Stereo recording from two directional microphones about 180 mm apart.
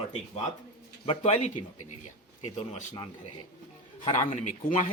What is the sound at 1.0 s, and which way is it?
Speech, 30° left (ahead or behind).